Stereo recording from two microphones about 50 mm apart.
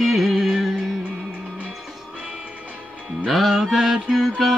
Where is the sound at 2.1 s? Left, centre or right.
Right.